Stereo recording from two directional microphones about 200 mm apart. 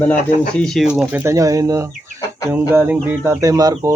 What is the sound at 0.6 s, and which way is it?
Speech, centre (ahead or behind).